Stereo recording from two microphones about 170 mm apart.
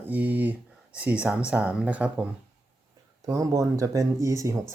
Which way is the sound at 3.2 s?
20° right (ahead or behind).